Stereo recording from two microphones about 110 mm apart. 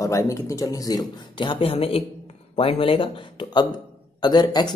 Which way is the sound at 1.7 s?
60° left (ahead or behind).